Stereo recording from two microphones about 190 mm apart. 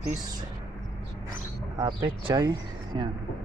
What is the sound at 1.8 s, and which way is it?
Speech, 20° right (ahead or behind).